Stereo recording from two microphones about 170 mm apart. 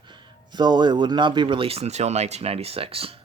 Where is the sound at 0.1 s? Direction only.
25° right (ahead or behind).